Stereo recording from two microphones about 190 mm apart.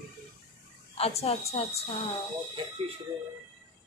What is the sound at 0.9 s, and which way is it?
Speech, 30° left (ahead or behind).